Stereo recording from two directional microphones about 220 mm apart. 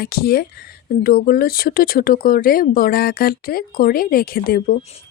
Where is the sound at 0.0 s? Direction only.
45° left (ahead or behind).